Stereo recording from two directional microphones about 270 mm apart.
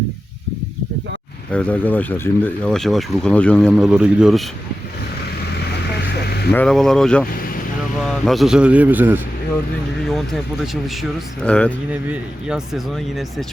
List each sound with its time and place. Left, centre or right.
1.5 s speech: centre
6.2 s vehicle: left
6.5 s speech: centre